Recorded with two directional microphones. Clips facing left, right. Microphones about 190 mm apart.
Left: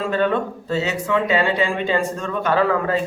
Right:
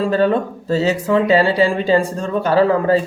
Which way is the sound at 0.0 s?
35° right (ahead or behind).